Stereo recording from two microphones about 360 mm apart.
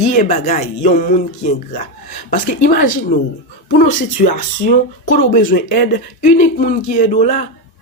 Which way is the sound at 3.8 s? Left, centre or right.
Left.